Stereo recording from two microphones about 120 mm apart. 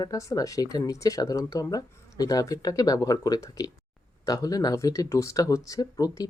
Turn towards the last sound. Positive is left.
turn(degrees=30)  # may be behind; listen again after turning